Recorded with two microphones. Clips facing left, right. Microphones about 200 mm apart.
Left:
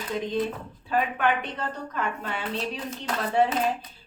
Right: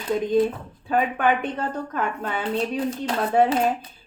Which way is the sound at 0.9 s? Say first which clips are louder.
Right 4 dB; 50° right (ahead or behind).